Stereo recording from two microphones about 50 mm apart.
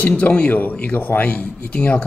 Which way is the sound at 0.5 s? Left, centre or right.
Left.